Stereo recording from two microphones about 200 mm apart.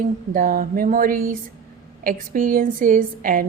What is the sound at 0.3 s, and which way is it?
A woman's voice, 45° right (ahead or behind).